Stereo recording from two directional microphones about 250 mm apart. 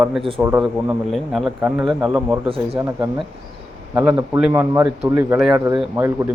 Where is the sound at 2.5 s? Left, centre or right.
Right.